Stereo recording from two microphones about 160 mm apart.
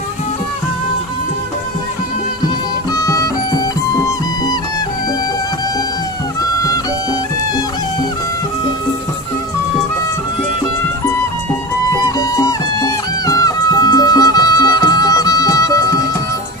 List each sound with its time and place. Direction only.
2.9 s music: 20° left (ahead or behind)
6.6 s music: 20° left (ahead or behind)
12.0 s music: 25° left (ahead or behind)